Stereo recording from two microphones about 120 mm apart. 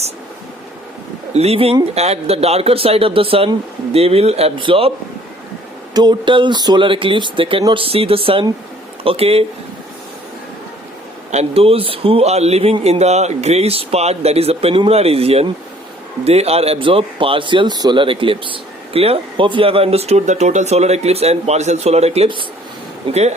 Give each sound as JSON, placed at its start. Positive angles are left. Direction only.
{"t": 1.3, "sound": "speech", "side_deg": -60}
{"t": 5.9, "sound": "speech", "side_deg": -35}
{"t": 11.3, "sound": "speech", "side_deg": -60}